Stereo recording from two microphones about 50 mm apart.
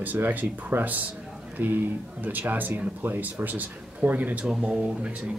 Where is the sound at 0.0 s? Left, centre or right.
Right.